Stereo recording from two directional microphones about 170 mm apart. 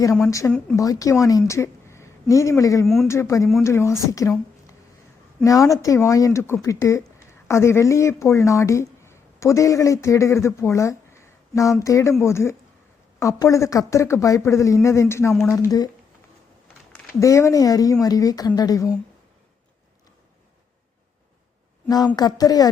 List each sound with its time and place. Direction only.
0.0 s a woman's voice: 20° left (ahead or behind)
2.8 s speech: centre (ahead or behind)
3.1 s speech: 15° left (ahead or behind)
17.2 s speech: 20° left (ahead or behind)
21.8 s speech: 25° left (ahead or behind)